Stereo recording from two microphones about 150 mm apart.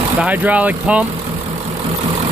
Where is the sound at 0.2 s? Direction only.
10° right (ahead or behind).